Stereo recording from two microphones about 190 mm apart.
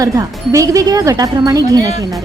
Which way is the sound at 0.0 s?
15° right (ahead or behind).